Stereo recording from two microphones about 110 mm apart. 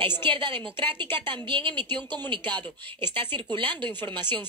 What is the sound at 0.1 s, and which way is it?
Speech, 20° left (ahead or behind).